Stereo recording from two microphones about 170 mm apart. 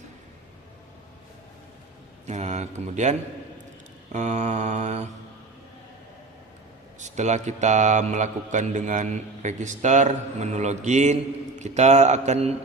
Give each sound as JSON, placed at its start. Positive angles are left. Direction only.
{"t": 2.2, "sound": "a man's voice", "side_deg": -45}
{"t": 7.0, "sound": "a man's voice", "side_deg": -45}